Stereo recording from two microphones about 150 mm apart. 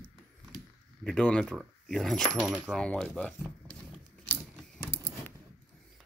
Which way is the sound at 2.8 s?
5° left (ahead or behind).